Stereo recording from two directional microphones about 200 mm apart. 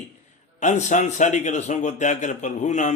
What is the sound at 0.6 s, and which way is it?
A man's voice, 35° left (ahead or behind).